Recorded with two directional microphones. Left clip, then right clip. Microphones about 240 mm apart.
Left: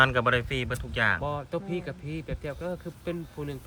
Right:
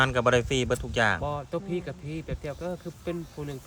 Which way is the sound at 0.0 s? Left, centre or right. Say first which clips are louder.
Even; centre.